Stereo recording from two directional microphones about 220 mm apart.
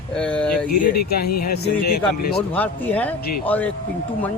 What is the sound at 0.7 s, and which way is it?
Speech, 45° left (ahead or behind).